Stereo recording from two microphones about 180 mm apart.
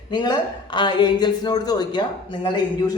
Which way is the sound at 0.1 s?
25° left (ahead or behind).